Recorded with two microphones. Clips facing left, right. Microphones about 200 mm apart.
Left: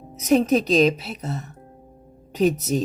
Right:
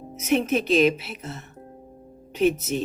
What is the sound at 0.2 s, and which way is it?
Speech, 35° left (ahead or behind).